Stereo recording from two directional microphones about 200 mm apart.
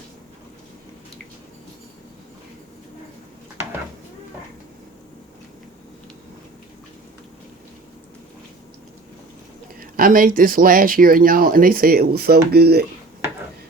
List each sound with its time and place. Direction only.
9.8 s speech: 45° right (ahead or behind)